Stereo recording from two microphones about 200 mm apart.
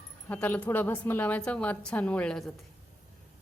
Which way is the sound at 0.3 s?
10° left (ahead or behind).